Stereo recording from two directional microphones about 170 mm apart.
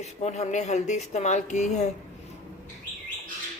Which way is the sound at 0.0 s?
40° left (ahead or behind).